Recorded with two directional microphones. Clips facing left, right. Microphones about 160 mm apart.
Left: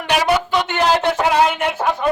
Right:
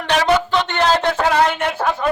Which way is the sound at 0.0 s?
10° left (ahead or behind).